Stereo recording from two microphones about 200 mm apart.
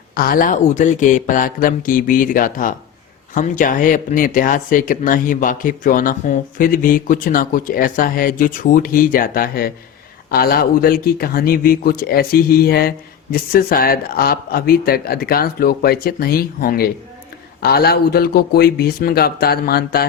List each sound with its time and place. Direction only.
0.1 s speech: 45° left (ahead or behind)